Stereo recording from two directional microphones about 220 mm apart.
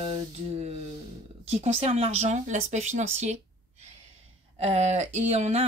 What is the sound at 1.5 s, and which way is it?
Speech, 30° right (ahead or behind).